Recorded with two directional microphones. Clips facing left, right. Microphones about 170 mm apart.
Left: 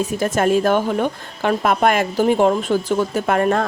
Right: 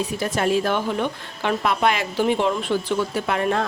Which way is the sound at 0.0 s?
45° left (ahead or behind).